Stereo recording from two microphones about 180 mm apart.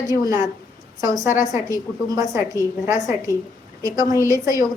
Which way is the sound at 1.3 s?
45° left (ahead or behind).